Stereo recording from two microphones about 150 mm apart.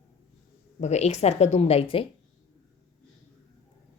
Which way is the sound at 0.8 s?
50° left (ahead or behind).